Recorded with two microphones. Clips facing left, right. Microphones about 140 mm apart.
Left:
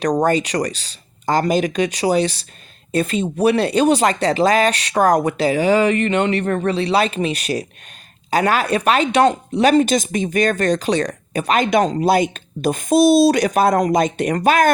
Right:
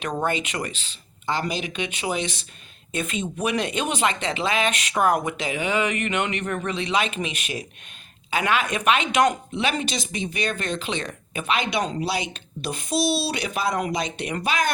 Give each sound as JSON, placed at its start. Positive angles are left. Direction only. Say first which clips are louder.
{"t": 0.0, "sound": "speech", "louder": "left 9 dB", "side_deg": 40}
{"t": 9.6, "sound": "speech", "louder": "left 13 dB", "side_deg": 45}